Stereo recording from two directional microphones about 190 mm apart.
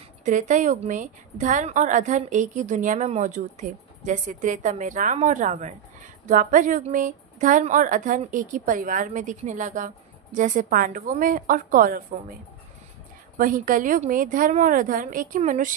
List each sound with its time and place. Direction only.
0.2 s a woman's voice: 40° right (ahead or behind)
13.4 s a woman's voice: 45° right (ahead or behind)